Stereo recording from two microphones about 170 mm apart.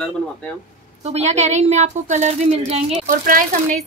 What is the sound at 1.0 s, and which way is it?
A woman's voice, 40° right (ahead or behind).